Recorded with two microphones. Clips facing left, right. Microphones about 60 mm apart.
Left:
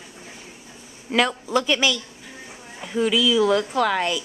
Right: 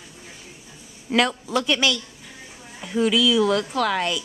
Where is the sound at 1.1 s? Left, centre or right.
Centre.